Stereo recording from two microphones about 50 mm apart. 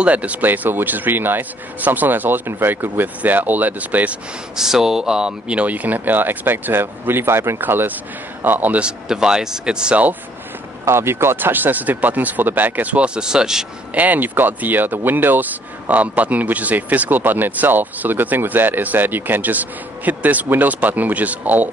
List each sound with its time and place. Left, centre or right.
0.0 s speech: right
4.6 s speech: centre
5.6 s speech: right
9.0 s speech: centre
10.9 s speech: right; by 13.7 s centre
13.9 s speech: right